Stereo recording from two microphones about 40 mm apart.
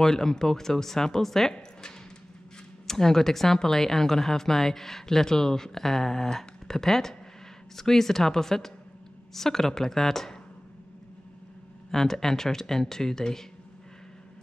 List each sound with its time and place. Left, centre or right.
0.0 s speech: centre
2.9 s speech: centre
11.9 s speech: centre